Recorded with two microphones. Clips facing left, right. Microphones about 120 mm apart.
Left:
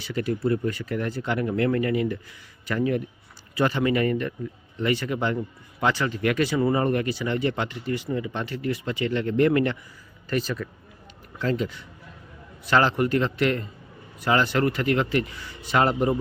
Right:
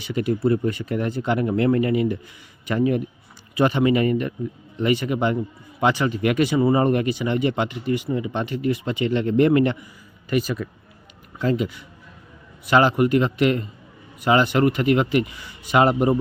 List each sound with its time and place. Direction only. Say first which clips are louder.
0.0 s speech: right 4 dB; 15° right (ahead or behind)